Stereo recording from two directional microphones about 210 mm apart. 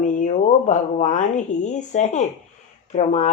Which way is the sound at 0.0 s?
35° left (ahead or behind).